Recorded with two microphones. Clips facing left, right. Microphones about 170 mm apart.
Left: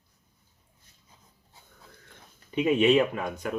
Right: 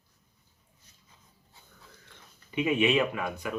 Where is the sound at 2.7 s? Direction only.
35° left (ahead or behind).